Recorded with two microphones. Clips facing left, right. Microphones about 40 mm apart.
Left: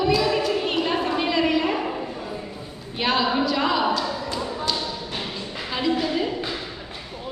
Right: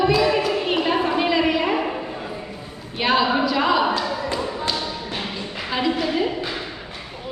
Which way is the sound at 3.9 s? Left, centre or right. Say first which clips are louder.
Right 2 dB; centre.